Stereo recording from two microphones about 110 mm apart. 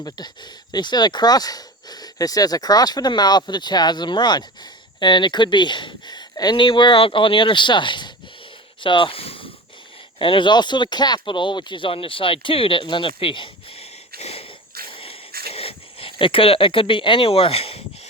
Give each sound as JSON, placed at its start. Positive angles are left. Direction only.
{"t": 0.7, "sound": "speech", "side_deg": 40}
{"t": 14.2, "sound": "wheeze", "side_deg": 70}
{"t": 14.8, "sound": "a sound", "side_deg": 55}